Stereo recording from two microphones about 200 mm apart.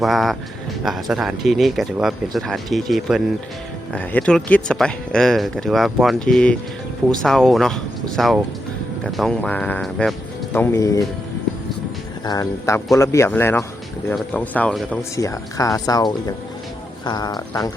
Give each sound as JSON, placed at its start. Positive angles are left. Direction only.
{"t": 0.0, "sound": "speech", "side_deg": 0}
{"t": 10.5, "sound": "speech", "side_deg": 15}
{"t": 12.2, "sound": "speech", "side_deg": 20}